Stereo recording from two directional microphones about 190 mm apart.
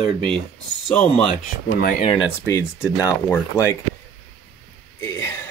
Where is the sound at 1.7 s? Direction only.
50° left (ahead or behind).